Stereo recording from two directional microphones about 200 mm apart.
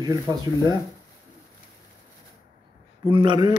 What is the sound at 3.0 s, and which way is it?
Speech, 25° right (ahead or behind).